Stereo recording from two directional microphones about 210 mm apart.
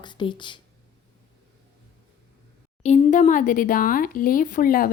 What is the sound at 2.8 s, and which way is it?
Speech, 35° left (ahead or behind).